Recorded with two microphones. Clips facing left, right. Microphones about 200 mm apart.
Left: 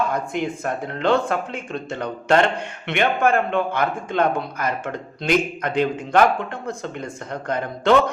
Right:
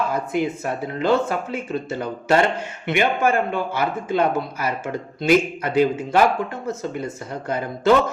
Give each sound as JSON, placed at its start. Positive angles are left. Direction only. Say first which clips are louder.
{"t": 0.1, "sound": "speech", "louder": "right 2 dB", "side_deg": -5}